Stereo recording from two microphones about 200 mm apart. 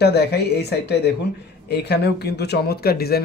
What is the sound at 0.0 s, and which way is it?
Speech, 55° left (ahead or behind).